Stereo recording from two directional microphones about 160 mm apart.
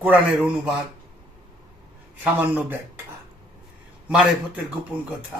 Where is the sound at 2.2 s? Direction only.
10° right (ahead or behind).